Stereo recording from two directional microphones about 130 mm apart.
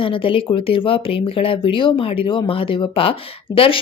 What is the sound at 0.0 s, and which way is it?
Speech, 45° left (ahead or behind).